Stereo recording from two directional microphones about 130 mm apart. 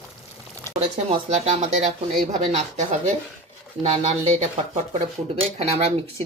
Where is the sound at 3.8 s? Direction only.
50° right (ahead or behind).